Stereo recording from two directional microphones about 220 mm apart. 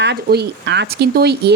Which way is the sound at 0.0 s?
50° right (ahead or behind).